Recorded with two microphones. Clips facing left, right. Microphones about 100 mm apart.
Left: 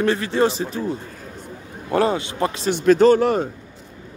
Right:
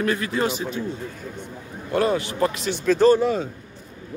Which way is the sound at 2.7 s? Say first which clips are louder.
Left 4 dB; 65° left (ahead or behind).